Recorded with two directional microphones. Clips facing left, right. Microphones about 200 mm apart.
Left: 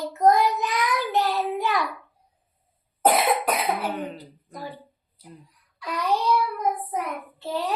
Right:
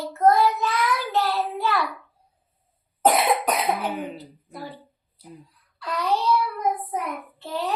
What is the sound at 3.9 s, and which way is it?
Speech, 5° right (ahead or behind).